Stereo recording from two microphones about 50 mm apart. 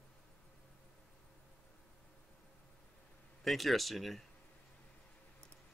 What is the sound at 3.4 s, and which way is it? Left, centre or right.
Speech, centre.